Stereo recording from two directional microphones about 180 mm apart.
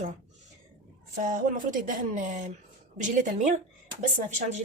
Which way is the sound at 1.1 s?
50° right (ahead or behind).